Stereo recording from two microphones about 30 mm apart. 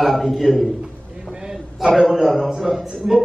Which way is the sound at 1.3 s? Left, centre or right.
Right.